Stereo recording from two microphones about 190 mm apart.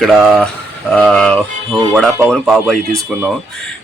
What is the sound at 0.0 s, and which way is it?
Speech, centre (ahead or behind).